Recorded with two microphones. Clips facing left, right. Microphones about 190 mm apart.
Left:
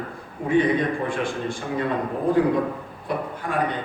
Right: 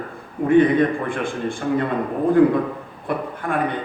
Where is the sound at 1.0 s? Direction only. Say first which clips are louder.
Right 2 dB; 55° right (ahead or behind).